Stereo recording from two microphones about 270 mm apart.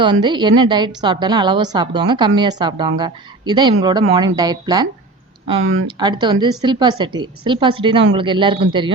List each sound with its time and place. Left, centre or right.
0.0 s a woman's voice: centre
5.5 s speech: right
6.0 s a woman's voice: centre